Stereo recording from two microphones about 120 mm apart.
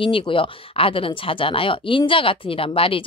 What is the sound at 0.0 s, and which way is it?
A woman's voice, 45° left (ahead or behind).